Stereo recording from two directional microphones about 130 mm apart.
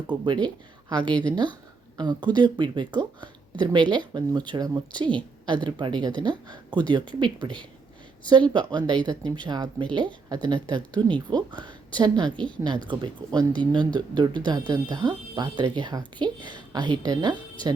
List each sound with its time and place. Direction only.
0.1 s speech: 35° right (ahead or behind)